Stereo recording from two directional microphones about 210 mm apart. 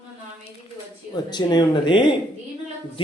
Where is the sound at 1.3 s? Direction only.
20° left (ahead or behind).